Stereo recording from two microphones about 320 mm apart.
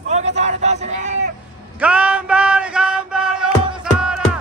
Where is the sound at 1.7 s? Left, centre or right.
Centre.